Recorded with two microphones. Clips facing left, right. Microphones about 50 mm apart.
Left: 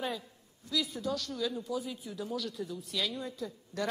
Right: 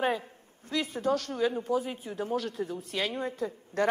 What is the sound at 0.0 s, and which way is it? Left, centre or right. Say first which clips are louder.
A man's voice: right 8 dB; right.